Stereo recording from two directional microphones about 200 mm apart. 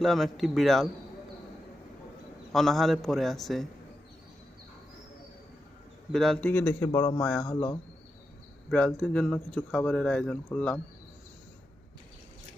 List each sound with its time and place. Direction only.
0.0 s speech: centre (ahead or behind)
2.5 s speech: centre (ahead or behind)
6.1 s a man's voice: centre (ahead or behind)
8.7 s speech: 5° left (ahead or behind)